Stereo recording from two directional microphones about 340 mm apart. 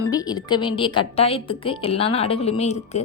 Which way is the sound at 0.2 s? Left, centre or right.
Centre.